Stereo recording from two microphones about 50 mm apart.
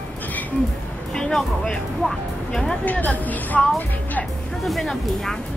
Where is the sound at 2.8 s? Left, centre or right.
Left.